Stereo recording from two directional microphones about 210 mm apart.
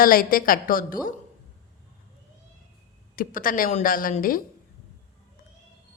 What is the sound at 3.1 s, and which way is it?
Speech, 40° left (ahead or behind).